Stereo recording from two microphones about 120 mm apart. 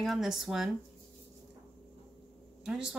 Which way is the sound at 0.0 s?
Centre (ahead or behind).